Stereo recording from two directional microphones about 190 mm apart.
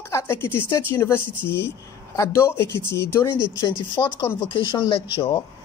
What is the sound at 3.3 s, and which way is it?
Speech, 25° left (ahead or behind).